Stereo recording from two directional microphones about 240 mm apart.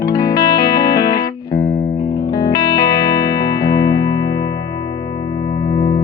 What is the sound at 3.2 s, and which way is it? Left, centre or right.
Music, centre.